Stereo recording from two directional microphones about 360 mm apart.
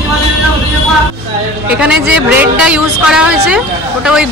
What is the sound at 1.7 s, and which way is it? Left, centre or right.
A woman's voice, centre.